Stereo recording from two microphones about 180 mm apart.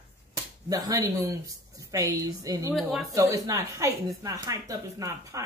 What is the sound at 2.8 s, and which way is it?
Speech, centre (ahead or behind).